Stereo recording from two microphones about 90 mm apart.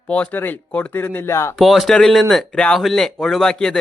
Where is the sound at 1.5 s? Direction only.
Centre (ahead or behind).